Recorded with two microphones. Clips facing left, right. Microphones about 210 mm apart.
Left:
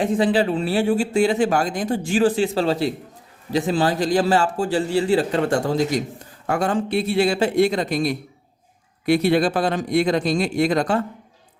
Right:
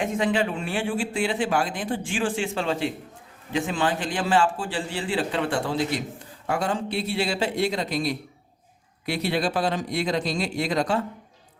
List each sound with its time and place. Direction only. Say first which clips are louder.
0.0 s speech: left 5 dB; 35° left (ahead or behind); by 11.0 s 50° left (ahead or behind)